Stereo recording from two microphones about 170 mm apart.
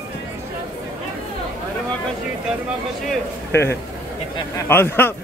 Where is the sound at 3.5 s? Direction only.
15° left (ahead or behind).